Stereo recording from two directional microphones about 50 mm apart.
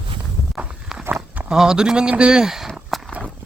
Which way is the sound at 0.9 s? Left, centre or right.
Centre.